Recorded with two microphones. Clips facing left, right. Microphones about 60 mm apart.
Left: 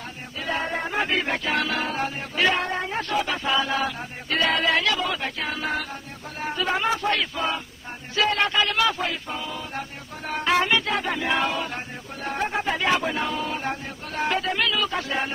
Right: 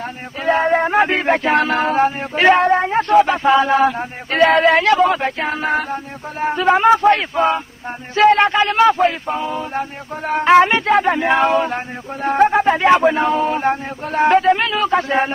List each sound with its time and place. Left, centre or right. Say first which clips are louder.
0.4 s music: right 12 dB; right